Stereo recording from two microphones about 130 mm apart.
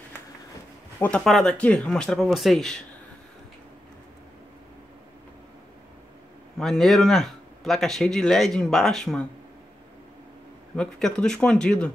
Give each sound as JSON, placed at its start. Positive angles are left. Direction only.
{"t": 0.9, "sound": "speech", "side_deg": 15}
{"t": 1.2, "sound": "speech", "side_deg": 5}
{"t": 6.6, "sound": "speech", "side_deg": 0}
{"t": 10.8, "sound": "speech", "side_deg": 5}